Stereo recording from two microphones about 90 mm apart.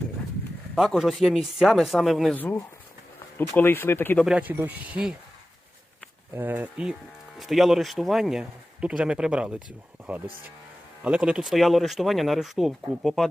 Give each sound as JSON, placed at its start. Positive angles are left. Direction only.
{"t": 0.8, "sound": "speech", "side_deg": 0}
{"t": 2.3, "sound": "speech", "side_deg": 20}
{"t": 4.4, "sound": "speech", "side_deg": -15}
{"t": 6.3, "sound": "speech", "side_deg": -20}
{"t": 7.3, "sound": "speech", "side_deg": 0}